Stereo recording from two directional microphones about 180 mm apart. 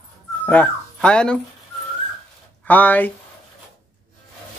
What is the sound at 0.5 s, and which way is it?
Speech, 5° left (ahead or behind).